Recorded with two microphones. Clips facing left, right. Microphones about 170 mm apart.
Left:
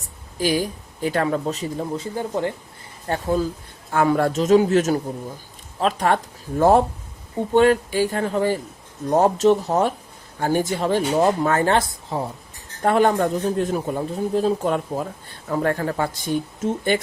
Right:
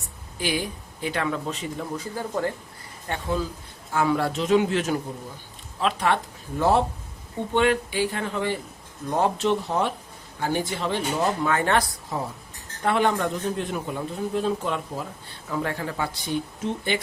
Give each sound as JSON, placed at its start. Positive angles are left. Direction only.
{"t": 0.3, "sound": "speech", "side_deg": 40}
{"t": 2.0, "sound": "speech", "side_deg": 20}
{"t": 3.1, "sound": "speech", "side_deg": 35}
{"t": 3.9, "sound": "speech", "side_deg": 50}
{"t": 12.8, "sound": "speech", "side_deg": 45}